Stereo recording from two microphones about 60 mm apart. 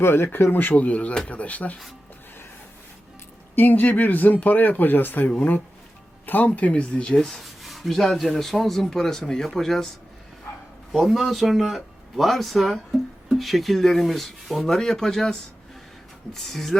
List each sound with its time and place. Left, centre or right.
0.0 s speech: left
0.5 s speech: left
3.5 s speech: left
6.5 s speech: centre
7.1 s speech: centre
10.9 s speech: centre